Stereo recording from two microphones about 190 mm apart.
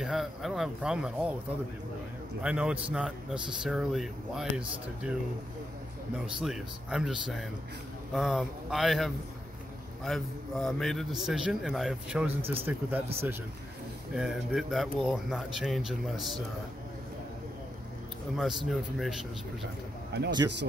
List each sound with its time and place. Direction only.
0.0 s speech: centre (ahead or behind)
2.4 s speech: 5° right (ahead or behind)
6.4 s speech: centre (ahead or behind)
14.1 s speech: 5° right (ahead or behind)
18.7 s speech: centre (ahead or behind)
20.1 s speech: 60° right (ahead or behind)